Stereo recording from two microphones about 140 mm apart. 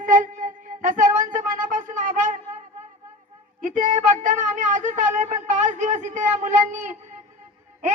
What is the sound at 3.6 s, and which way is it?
A woman's voice, 70° right (ahead or behind).